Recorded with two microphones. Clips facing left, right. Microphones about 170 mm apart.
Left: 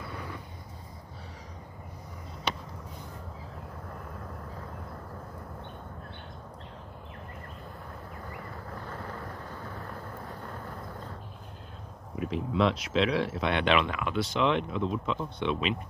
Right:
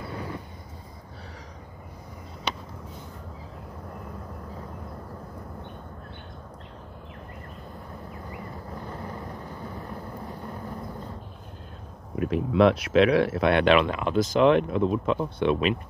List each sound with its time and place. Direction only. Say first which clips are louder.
0.1 s vehicle: right 5 dB; 30° right (ahead or behind)
8.7 s vehicle: right 3 dB; 20° right (ahead or behind)
12.2 s speech: right 7 dB; 55° right (ahead or behind)
13.8 s speech: right 6 dB; 35° right (ahead or behind); by 15.8 s 50° right (ahead or behind)